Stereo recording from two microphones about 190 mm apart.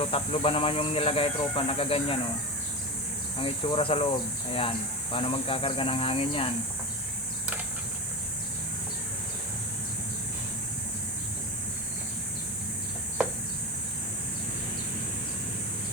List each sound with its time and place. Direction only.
0.0 s speech: 30° left (ahead or behind)
3.3 s speech: 30° left (ahead or behind)